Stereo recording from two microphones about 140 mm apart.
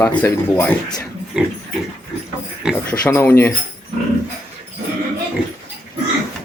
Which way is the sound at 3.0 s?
15° left (ahead or behind).